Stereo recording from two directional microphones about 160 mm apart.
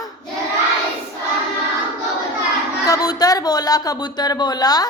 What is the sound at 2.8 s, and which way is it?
Speech, 20° left (ahead or behind).